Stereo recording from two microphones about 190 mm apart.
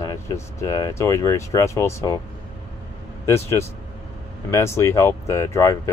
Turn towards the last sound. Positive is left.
turn(degrees=15)  # may be behind; listen again after turning